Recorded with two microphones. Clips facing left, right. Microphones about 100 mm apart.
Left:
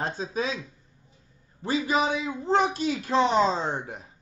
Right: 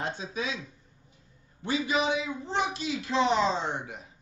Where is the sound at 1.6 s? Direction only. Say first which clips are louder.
Left 3 dB; 40° left (ahead or behind).